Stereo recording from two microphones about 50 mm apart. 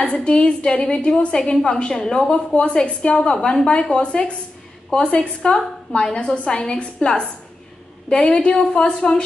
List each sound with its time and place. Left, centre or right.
0.0 s a woman's voice: left